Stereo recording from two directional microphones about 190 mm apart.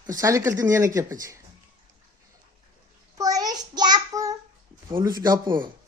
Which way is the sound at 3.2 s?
20° right (ahead or behind).